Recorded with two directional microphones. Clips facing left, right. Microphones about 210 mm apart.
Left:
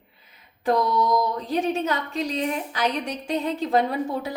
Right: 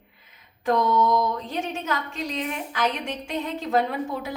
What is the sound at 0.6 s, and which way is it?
A woman's voice, 35° left (ahead or behind).